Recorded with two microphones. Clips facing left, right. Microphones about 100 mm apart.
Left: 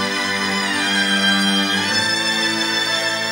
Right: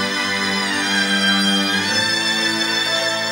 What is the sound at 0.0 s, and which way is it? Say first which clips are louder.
Music: even; centre (ahead or behind).